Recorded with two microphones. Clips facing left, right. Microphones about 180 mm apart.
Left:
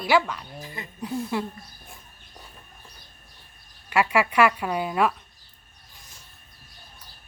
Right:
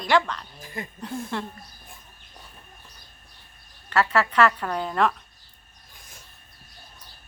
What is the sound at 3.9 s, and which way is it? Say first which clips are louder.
Speech: left 1 dB; 10° left (ahead or behind).